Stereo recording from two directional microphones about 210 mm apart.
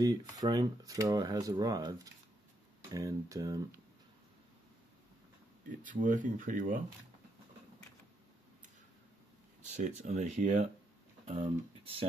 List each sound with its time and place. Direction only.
0.0 s speech: 15° right (ahead or behind)
5.9 s speech: 40° right (ahead or behind)
9.8 s speech: 35° right (ahead or behind)